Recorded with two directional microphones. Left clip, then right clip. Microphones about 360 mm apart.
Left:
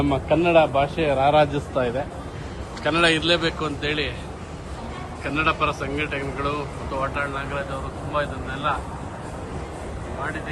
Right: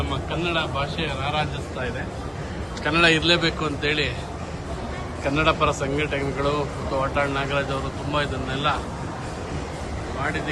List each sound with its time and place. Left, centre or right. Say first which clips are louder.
0.1 s speech: left 9 dB; centre
2.8 s speech: right 1 dB; centre
5.2 s speech: right 1 dB; centre